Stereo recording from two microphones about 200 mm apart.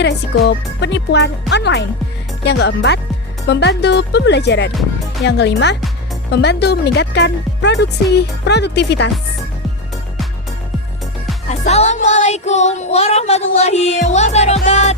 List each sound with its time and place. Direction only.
0.0 s speech: 60° left (ahead or behind)
11.4 s music: 35° left (ahead or behind)